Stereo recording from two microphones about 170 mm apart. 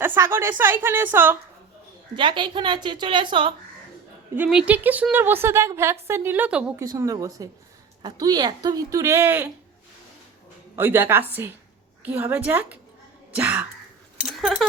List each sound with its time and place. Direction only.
0.0 s a woman's voice: 15° right (ahead or behind)
2.1 s speech: 30° right (ahead or behind)
4.4 s a woman's voice: 5° right (ahead or behind)
6.8 s speech: 20° right (ahead or behind)
10.8 s a woman's voice: 10° right (ahead or behind)